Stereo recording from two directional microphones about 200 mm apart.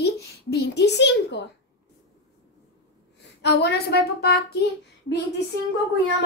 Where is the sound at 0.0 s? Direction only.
55° left (ahead or behind).